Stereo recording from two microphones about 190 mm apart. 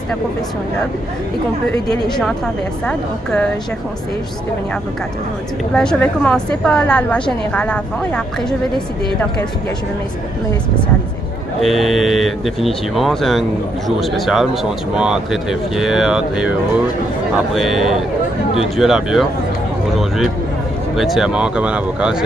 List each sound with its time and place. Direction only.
2.9 s a woman's voice: 5° left (ahead or behind)
5.7 s a woman's voice: 5° left (ahead or behind)
11.6 s a woman's voice: centre (ahead or behind)
17.6 s a woman's voice: centre (ahead or behind)
20.9 s a woman's voice: centre (ahead or behind)